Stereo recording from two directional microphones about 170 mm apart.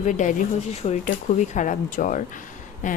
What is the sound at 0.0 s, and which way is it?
Speech, 45° left (ahead or behind).